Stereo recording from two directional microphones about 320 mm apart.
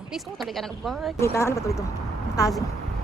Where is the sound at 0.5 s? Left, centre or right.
Centre.